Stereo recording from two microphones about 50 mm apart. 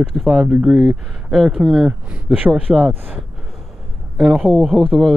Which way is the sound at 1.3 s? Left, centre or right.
Centre.